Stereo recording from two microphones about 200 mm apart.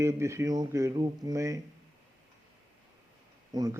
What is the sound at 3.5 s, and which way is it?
Mantra, 20° right (ahead or behind).